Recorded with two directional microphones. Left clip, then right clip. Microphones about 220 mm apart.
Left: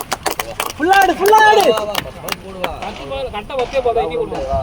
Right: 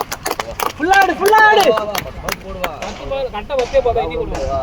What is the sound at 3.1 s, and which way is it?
Speech, 25° left (ahead or behind).